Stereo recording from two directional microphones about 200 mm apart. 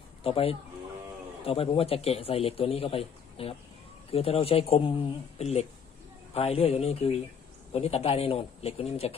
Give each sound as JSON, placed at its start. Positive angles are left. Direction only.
{"t": 0.2, "sound": "a man's voice", "side_deg": 30}